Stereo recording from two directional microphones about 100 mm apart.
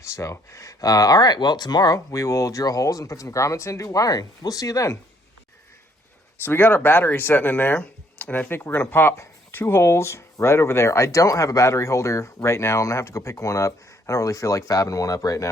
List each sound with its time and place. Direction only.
0.0 s speech: 30° left (ahead or behind)
6.4 s speech: 20° left (ahead or behind)